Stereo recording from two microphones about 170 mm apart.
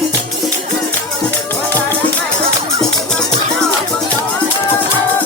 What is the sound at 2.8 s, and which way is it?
Music, 5° left (ahead or behind).